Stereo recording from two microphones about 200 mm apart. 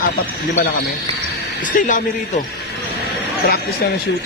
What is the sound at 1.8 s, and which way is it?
Speech, 40° left (ahead or behind).